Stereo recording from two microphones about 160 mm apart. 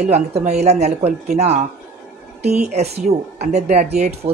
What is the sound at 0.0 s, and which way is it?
Speech, 45° right (ahead or behind).